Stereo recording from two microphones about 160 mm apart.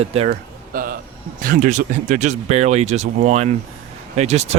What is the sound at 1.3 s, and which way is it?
Speech, 55° right (ahead or behind).